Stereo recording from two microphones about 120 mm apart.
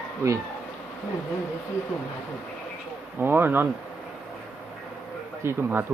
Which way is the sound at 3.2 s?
15° right (ahead or behind).